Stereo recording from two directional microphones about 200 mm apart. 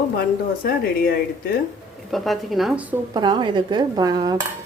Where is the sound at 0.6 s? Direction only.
45° left (ahead or behind).